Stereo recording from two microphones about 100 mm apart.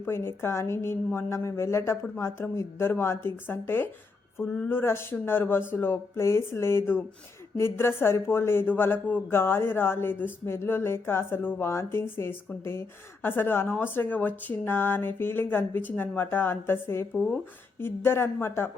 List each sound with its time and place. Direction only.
0.0 s speech: 25° left (ahead or behind)
17.2 s speech: 5° left (ahead or behind)
17.7 s speech: 20° left (ahead or behind)